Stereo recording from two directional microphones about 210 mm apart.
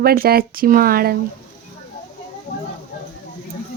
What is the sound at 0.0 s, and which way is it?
Speech, 45° right (ahead or behind).